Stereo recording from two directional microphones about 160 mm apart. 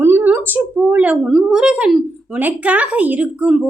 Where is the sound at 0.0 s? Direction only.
15° right (ahead or behind).